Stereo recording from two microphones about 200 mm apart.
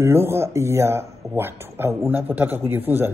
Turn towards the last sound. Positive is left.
turn(degrees=-10)  # may be behind; listen again after turning